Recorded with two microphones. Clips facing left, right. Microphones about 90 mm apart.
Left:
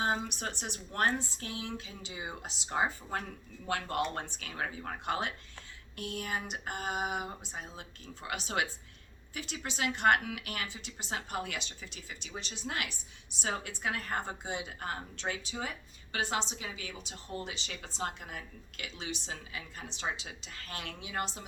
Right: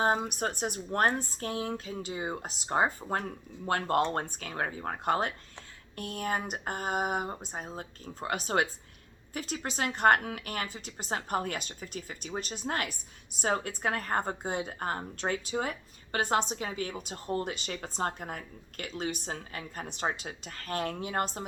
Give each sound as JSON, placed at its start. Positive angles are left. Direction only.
{"t": 0.0, "sound": "a woman's voice", "side_deg": -50}